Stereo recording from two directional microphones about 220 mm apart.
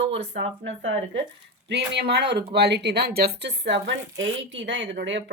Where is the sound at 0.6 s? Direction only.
55° right (ahead or behind).